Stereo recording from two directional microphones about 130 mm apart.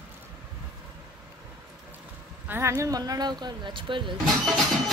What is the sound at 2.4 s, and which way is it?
Speech, 20° right (ahead or behind).